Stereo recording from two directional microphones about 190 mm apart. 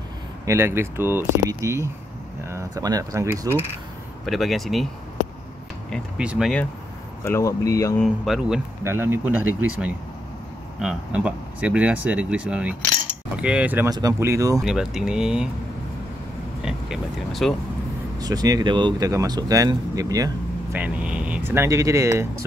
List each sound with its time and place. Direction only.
0.5 s speech: 15° right (ahead or behind)
4.3 s speech: centre (ahead or behind)
5.9 s speech: centre (ahead or behind)
7.2 s speech: 15° left (ahead or behind)
8.0 s speech: centre (ahead or behind)
8.8 s speech: 10° right (ahead or behind)
13.8 s speech: 20° right (ahead or behind)
14.6 s speech: 5° right (ahead or behind)
16.6 s speech: centre (ahead or behind)
18.2 s speech: 20° right (ahead or behind)
20.7 s speech: 5° right (ahead or behind)